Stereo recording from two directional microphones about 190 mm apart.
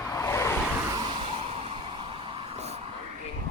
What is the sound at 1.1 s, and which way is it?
Vehicle, 30° right (ahead or behind).